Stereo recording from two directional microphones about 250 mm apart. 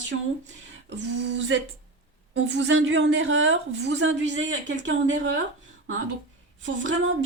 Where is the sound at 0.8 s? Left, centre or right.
Right.